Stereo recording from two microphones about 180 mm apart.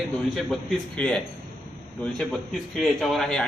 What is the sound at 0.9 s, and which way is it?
A man's voice, 5° left (ahead or behind).